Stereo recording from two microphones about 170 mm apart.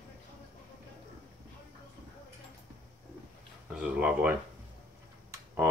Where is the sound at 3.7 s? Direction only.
5° right (ahead or behind).